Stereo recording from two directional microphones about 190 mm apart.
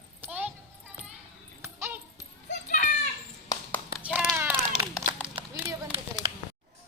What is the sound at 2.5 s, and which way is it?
Children playing, 40° left (ahead or behind).